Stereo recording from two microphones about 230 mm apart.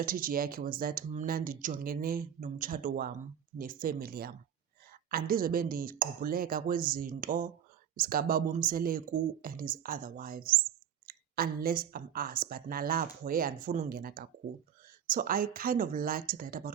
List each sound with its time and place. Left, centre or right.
0.0 s a woman's voice: right